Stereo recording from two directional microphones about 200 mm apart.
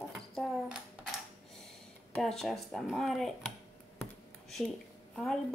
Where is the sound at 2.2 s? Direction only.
Centre (ahead or behind).